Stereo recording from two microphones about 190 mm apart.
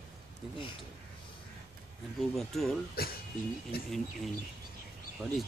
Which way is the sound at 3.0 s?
55° left (ahead or behind).